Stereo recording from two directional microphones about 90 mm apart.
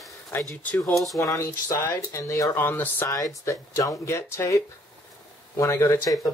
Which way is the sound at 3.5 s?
35° left (ahead or behind).